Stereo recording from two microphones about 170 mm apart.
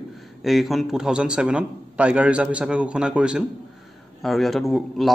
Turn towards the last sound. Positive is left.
turn(degrees=0)  # may be behind; listen again after turning